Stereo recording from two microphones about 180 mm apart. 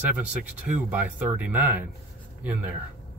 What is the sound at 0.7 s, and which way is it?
Speech, 10° right (ahead or behind).